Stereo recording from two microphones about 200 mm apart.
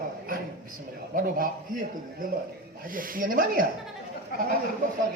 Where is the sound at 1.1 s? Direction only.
45° right (ahead or behind).